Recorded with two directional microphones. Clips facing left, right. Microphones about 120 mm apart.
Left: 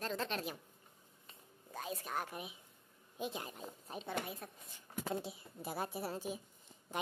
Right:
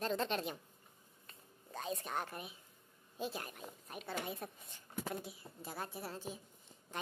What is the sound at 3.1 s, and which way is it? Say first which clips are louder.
Speech: even; 15° left (ahead or behind).